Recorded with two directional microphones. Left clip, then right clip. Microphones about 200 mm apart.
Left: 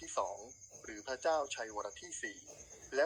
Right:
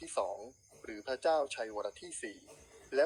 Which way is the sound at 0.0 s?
25° right (ahead or behind).